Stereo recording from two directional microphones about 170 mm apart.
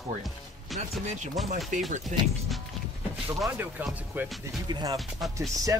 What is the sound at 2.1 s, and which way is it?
Speech, 50° right (ahead or behind).